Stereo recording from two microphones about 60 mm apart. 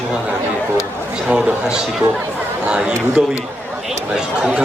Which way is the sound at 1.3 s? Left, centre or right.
Centre.